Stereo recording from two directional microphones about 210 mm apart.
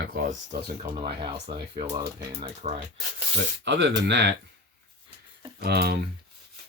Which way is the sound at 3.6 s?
55° right (ahead or behind).